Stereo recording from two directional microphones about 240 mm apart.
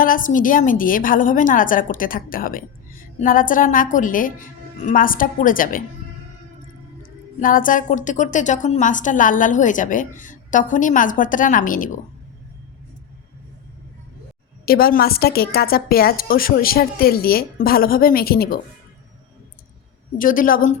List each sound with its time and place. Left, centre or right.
0.0 s a woman's voice: left
7.3 s a woman's voice: left
14.6 s a woman's voice: left
20.1 s a woman's voice: left